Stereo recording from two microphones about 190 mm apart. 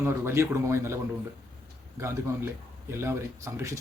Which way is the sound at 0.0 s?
15° right (ahead or behind).